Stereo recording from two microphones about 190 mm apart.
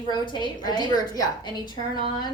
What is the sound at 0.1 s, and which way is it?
A woman's voice, 25° left (ahead or behind).